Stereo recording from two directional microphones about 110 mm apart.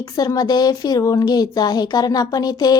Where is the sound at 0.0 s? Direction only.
35° left (ahead or behind).